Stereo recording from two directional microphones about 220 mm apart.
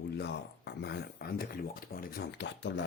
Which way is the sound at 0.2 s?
50° left (ahead or behind).